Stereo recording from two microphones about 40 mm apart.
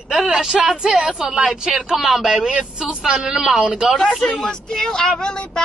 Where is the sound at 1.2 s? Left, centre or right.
Centre.